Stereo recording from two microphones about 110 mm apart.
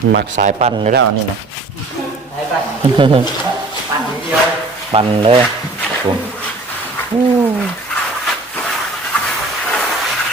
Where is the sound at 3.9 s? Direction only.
35° right (ahead or behind).